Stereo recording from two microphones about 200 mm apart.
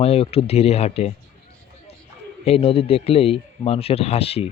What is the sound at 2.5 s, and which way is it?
Speech, 30° left (ahead or behind).